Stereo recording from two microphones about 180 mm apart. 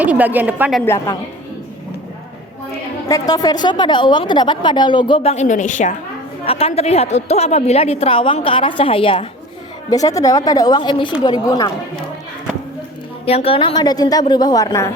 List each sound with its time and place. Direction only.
0.0 s a woman's voice: 10° right (ahead or behind)
0.8 s a woman's voice: 15° left (ahead or behind)
3.1 s a woman's voice: 20° left (ahead or behind); by 6.0 s 45° left (ahead or behind)
6.4 s a woman's voice: 35° left (ahead or behind)
9.9 s a woman's voice: 20° left (ahead or behind)
13.2 s a woman's voice: 35° left (ahead or behind)